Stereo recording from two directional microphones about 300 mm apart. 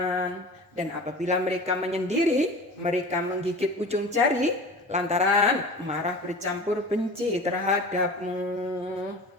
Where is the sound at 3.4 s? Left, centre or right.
Right.